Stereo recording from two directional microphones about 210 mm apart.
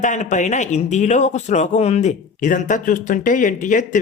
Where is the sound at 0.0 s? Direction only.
35° left (ahead or behind).